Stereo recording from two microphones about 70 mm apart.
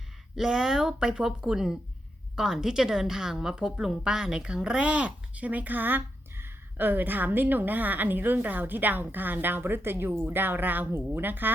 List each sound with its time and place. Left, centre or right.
0.3 s a woman's voice: centre; by 11.5 s right